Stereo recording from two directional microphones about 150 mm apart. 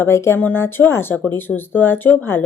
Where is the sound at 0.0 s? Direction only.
15° left (ahead or behind).